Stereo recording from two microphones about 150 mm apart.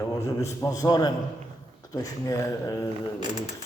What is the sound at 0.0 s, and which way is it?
A man's voice, 20° left (ahead or behind).